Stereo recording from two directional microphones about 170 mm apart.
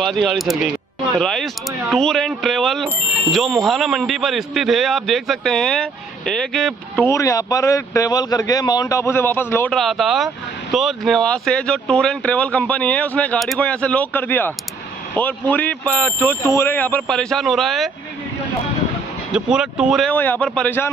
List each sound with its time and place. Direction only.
0.0 s speech: centre (ahead or behind)
7.2 s a man's voice: 20° left (ahead or behind)
9.8 s speech: centre (ahead or behind)
19.3 s speech: 5° right (ahead or behind)